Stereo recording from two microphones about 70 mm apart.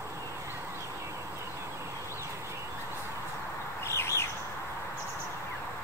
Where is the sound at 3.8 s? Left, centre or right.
Left.